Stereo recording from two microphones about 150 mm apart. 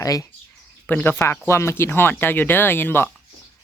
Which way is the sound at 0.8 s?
10° left (ahead or behind).